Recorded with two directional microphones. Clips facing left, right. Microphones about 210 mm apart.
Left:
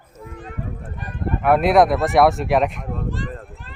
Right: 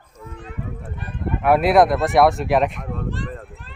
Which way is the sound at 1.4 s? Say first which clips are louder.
Even; centre (ahead or behind).